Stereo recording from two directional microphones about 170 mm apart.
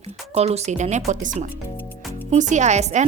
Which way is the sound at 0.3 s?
40° right (ahead or behind).